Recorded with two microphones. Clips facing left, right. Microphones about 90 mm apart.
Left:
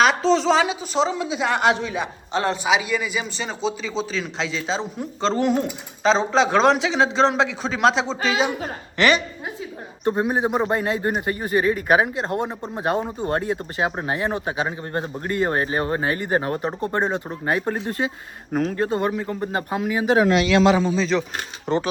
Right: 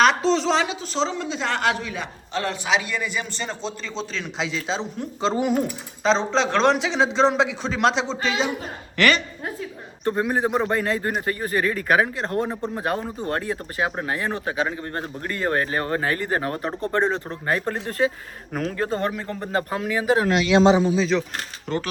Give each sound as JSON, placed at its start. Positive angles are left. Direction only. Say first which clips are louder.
{"t": 0.0, "sound": "a woman's voice", "louder": "left 1 dB", "side_deg": 0}
{"t": 2.6, "sound": "speech", "louder": "left 3 dB", "side_deg": 10}
{"t": 5.2, "sound": "speech", "louder": "left 1 dB", "side_deg": -10}
{"t": 9.0, "sound": "a woman's voice", "louder": "left 1 dB", "side_deg": 20}
{"t": 18.5, "sound": "speech", "louder": "left 4 dB", "side_deg": 30}
{"t": 18.9, "sound": "a woman's voice", "louder": "left 2 dB", "side_deg": 10}
{"t": 20.7, "sound": "speech", "louder": "even", "side_deg": -10}
{"t": 21.7, "sound": "speech", "louder": "left 4 dB", "side_deg": 20}